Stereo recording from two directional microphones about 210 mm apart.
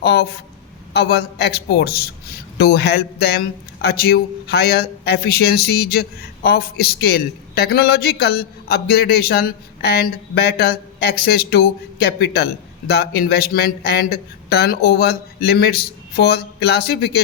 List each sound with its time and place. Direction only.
0.0 s speech: 50° left (ahead or behind)